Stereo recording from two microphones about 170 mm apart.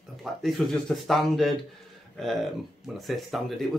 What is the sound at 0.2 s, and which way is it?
Speech, centre (ahead or behind).